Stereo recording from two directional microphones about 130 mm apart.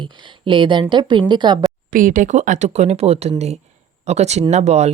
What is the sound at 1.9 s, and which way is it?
Speech, 90° right.